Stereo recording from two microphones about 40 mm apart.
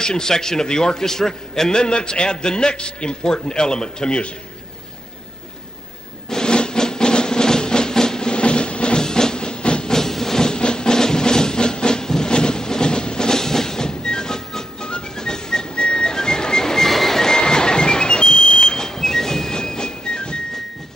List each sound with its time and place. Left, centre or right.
0.0 s a man's voice: centre
6.3 s drum: left
8.3 s train: left
9.9 s music: centre
14.9 s whistling: left